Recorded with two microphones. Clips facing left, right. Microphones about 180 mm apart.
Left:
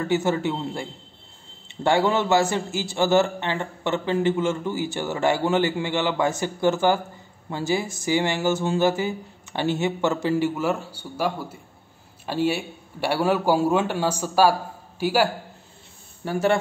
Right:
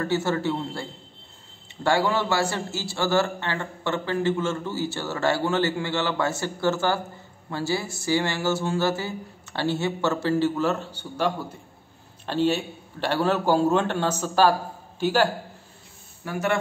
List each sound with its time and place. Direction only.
0.0 s a man's voice: 15° left (ahead or behind)
16.3 s a man's voice: 30° left (ahead or behind)